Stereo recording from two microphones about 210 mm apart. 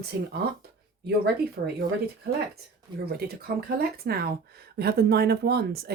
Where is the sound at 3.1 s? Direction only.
50° right (ahead or behind).